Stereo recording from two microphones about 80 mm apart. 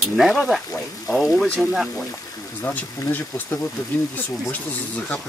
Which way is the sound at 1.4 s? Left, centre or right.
Centre.